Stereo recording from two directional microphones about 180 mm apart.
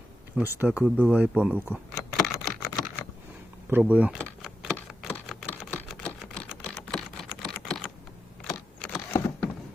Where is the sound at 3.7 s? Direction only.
10° right (ahead or behind).